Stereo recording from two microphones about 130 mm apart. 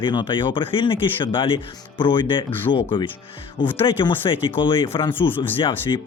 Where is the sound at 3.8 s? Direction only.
40° left (ahead or behind).